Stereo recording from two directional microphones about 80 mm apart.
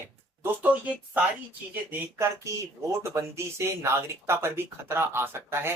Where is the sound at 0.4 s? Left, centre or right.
Right.